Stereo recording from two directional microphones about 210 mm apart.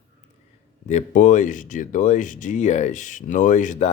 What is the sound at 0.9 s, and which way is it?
Speech, 35° left (ahead or behind).